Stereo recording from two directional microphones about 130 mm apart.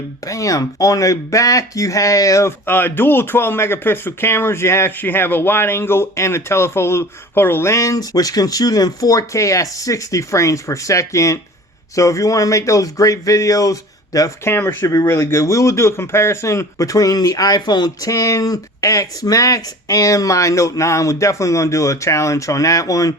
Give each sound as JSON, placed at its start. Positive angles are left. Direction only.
{"t": 0.3, "sound": "speech", "side_deg": 25}